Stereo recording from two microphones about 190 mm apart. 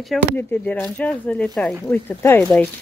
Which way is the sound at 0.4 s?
10° left (ahead or behind).